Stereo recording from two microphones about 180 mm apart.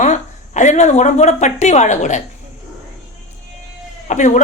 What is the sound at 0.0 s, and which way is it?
A woman's voice, 40° left (ahead or behind).